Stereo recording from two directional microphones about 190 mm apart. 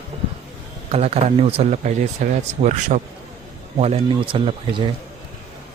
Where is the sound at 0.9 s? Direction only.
35° right (ahead or behind).